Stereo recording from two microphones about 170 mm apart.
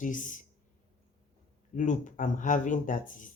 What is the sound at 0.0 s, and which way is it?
Speech, 50° left (ahead or behind).